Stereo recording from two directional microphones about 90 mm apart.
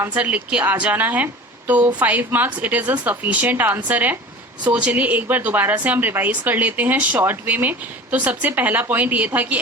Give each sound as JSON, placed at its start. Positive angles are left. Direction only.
{"t": 0.0, "sound": "speech", "side_deg": -20}